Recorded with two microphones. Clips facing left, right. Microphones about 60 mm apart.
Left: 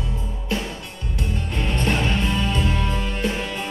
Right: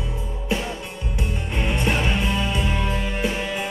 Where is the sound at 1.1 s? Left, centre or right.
Centre.